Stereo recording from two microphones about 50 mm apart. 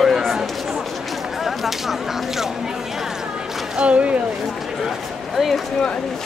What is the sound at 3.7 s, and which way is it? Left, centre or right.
Speech, right.